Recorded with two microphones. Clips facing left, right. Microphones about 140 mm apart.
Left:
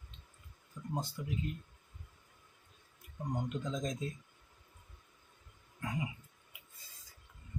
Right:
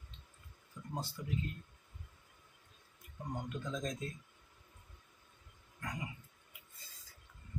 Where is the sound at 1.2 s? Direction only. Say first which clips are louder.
Left 3 dB; 15° left (ahead or behind).